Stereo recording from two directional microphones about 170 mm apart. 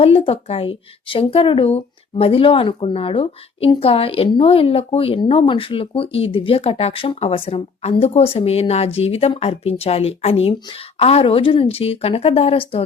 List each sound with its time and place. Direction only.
0.0 s speech: 35° left (ahead or behind)